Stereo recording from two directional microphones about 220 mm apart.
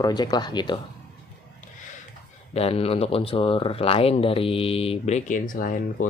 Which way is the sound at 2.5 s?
25° left (ahead or behind).